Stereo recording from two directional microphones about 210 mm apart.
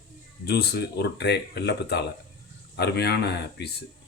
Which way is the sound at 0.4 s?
50° left (ahead or behind).